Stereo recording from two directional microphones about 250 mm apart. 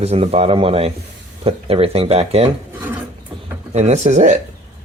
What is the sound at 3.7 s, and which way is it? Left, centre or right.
Speech, right.